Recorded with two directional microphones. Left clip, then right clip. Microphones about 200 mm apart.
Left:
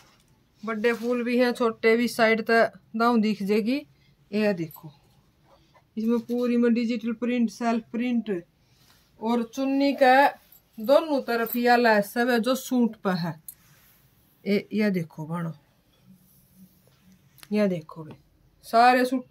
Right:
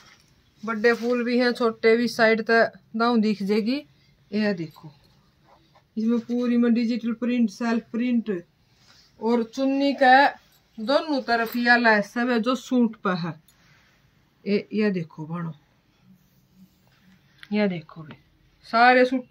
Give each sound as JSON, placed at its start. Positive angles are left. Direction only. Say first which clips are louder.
{"t": 0.7, "sound": "speech", "louder": "right 4 dB", "side_deg": 0}
{"t": 5.9, "sound": "speech", "louder": "even", "side_deg": -10}
{"t": 14.4, "sound": "speech", "louder": "right 1 dB", "side_deg": 40}
{"t": 17.5, "sound": "speech", "louder": "even", "side_deg": 50}
{"t": 18.7, "sound": "speech", "louder": "right 2 dB", "side_deg": 40}